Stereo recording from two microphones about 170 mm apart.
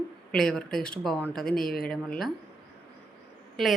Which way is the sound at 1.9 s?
5° left (ahead or behind).